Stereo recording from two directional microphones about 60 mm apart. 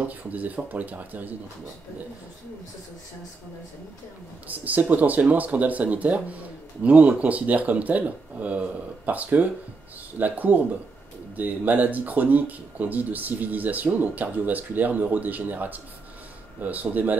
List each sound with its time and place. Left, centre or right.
0.0 s speech: right
4.5 s speech: right